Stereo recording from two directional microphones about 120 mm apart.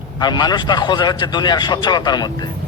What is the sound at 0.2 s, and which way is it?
A man's voice, 35° left (ahead or behind).